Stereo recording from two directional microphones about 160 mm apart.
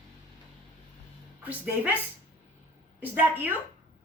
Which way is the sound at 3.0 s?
10° right (ahead or behind).